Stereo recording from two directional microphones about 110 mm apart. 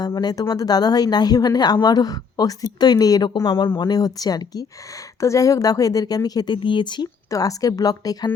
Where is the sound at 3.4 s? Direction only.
50° left (ahead or behind).